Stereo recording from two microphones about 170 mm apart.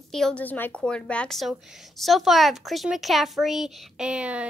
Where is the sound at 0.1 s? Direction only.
5° left (ahead or behind).